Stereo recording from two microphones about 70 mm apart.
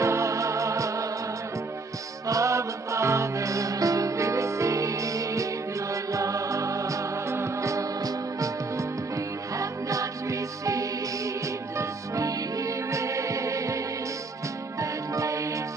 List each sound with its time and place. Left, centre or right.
0.0 s music: right
2.2 s music: right
14.8 s music: right